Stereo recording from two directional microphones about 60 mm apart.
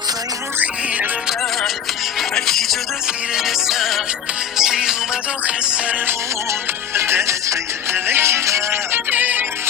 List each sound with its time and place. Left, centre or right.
2.3 s music: centre; by 6.0 s right
6.5 s music: right
9.0 s music: right